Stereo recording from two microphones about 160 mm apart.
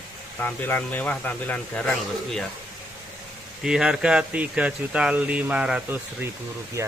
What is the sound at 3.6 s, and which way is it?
Speech, 5° right (ahead or behind).